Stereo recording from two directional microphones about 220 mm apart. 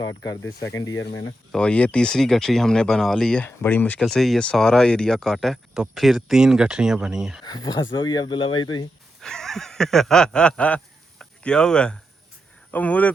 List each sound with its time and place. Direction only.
0.0 s speech: 15° left (ahead or behind)
1.5 s speech: 5° left (ahead or behind)
7.4 s speech: 20° left (ahead or behind)
9.2 s speech: centre (ahead or behind)